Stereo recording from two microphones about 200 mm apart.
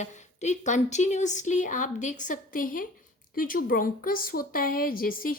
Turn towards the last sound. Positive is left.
turn(degrees=45)  # may be behind; listen again after turning